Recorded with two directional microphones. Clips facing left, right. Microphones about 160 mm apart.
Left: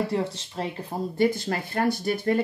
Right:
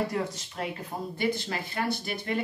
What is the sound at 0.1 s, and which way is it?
Speech, 30° left (ahead or behind).